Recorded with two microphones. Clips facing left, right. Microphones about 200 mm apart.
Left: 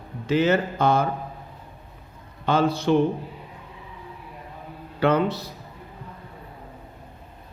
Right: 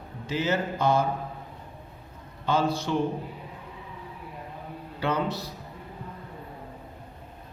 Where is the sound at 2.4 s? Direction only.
60° left (ahead or behind).